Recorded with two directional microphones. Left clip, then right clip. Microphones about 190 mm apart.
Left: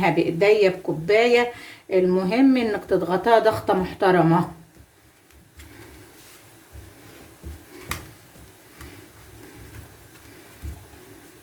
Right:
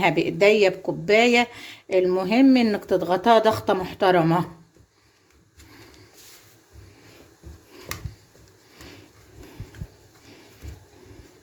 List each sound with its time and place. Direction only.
0.0 s speech: 40° right (ahead or behind)